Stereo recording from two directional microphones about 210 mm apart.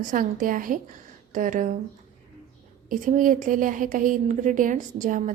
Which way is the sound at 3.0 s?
40° right (ahead or behind).